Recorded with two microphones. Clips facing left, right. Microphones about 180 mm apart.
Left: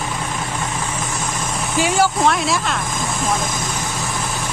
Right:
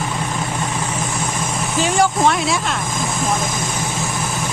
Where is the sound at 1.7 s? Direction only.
5° left (ahead or behind).